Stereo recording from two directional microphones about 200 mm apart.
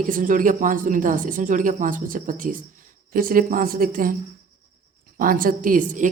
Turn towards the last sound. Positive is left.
turn(degrees=-40)  # may be behind; listen again after turning